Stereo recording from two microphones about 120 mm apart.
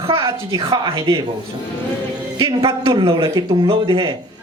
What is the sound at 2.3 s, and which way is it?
Speech, 45° right (ahead or behind).